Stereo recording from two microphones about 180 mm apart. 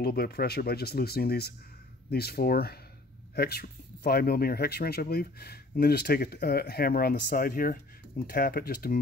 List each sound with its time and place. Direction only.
0.0 s speech: 60° left (ahead or behind)